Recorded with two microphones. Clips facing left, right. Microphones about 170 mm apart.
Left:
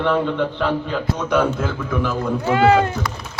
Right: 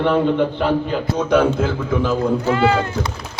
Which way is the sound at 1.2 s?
30° right (ahead or behind).